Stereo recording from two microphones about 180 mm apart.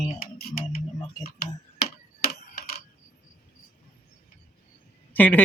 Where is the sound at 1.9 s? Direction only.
60° left (ahead or behind).